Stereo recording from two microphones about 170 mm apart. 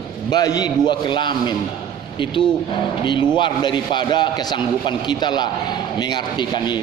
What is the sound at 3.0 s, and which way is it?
A man's voice, 30° left (ahead or behind).